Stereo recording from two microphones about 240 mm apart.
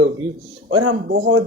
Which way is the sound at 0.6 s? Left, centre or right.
Right.